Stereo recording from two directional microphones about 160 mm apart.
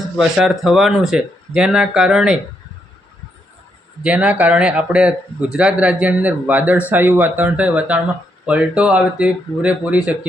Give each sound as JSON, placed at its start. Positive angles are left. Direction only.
{"t": 0.2, "sound": "speech", "side_deg": 0}
{"t": 4.0, "sound": "speech", "side_deg": -5}